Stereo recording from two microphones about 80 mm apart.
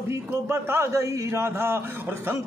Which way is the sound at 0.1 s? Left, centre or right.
Right.